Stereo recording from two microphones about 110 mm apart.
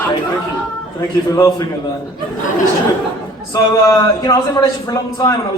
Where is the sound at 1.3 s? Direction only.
35° left (ahead or behind).